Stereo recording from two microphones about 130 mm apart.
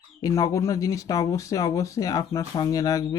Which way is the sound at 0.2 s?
25° left (ahead or behind).